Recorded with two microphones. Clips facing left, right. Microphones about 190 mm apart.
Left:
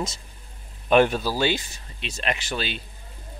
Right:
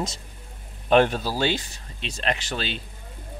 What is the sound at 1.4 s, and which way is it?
Speech, 10° left (ahead or behind).